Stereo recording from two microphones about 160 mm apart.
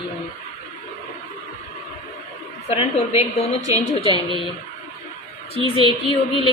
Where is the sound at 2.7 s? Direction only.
35° left (ahead or behind).